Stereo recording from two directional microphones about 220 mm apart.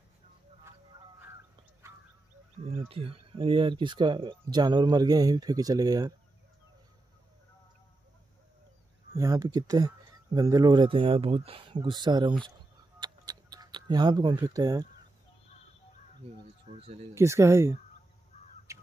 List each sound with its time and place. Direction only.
2.6 s speech: 25° right (ahead or behind)
9.1 s speech: 15° right (ahead or behind)
13.0 s a sound: 15° right (ahead or behind)
16.2 s speech: 30° right (ahead or behind)
17.1 s speech: 15° right (ahead or behind)
18.7 s bird: 15° right (ahead or behind)